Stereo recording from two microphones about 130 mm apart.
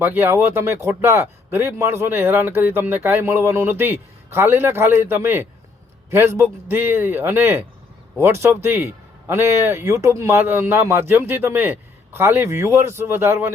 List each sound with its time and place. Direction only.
0.0 s a man's voice: 15° right (ahead or behind)